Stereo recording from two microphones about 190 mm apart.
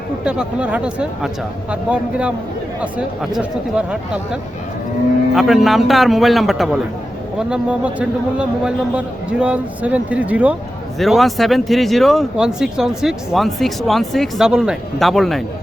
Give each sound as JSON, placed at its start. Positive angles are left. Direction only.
{"t": 0.3, "sound": "a man's voice", "side_deg": -5}